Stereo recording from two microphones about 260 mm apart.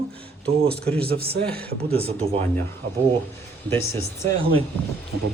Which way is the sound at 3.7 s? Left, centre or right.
Centre.